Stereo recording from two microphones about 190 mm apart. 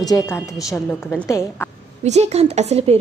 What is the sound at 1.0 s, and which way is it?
Speech, 15° left (ahead or behind).